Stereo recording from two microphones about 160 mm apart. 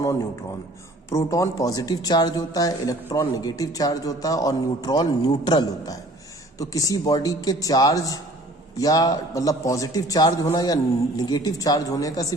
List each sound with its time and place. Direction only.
1.1 s speech: 20° left (ahead or behind)